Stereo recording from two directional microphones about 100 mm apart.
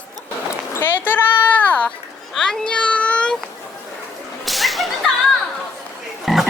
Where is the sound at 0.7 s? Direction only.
20° left (ahead or behind).